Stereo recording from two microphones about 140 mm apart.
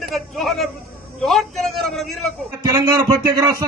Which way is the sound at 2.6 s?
20° right (ahead or behind).